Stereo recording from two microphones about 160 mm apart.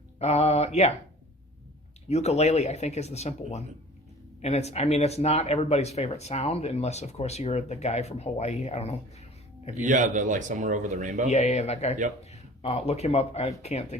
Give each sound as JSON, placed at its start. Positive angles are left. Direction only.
{"t": 0.2, "sound": "speech", "side_deg": 40}
{"t": 2.0, "sound": "speech", "side_deg": 40}
{"t": 9.8, "sound": "speech", "side_deg": -55}
{"t": 11.3, "sound": "speech", "side_deg": 45}